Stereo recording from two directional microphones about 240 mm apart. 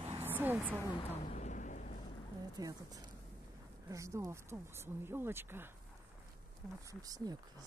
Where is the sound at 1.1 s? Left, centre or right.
Left.